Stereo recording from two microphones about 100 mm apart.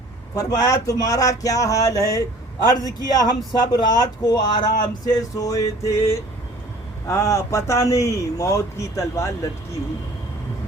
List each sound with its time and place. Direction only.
0.3 s speech: 35° left (ahead or behind)